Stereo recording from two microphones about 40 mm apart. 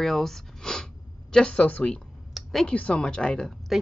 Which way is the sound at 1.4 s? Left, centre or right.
Left.